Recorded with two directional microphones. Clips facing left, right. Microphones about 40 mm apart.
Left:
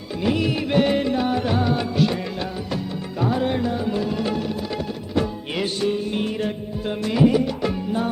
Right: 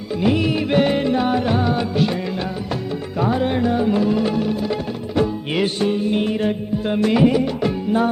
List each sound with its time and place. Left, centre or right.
0.2 s music: right
1.1 s music: right
1.4 s music: centre
3.2 s music: right
5.5 s music: right